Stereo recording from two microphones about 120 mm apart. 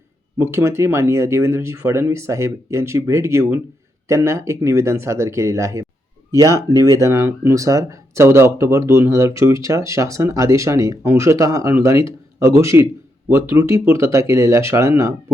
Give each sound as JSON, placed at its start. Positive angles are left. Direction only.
{"t": 0.3, "sound": "speech", "side_deg": -20}